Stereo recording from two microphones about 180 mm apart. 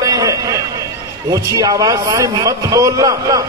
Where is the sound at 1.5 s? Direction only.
20° right (ahead or behind).